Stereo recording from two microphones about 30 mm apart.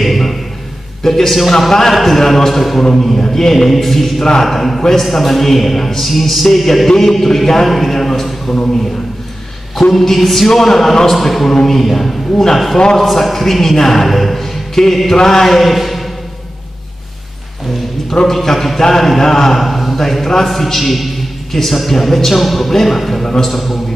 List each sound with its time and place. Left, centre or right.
0.0 s a sound: centre
1.0 s a man's voice: centre
9.9 s a man's voice: centre
12.3 s a man's voice: centre
12.9 s a man's voice: centre
18.2 s a man's voice: centre
19.6 s a sound: centre
20.0 s a man's voice: centre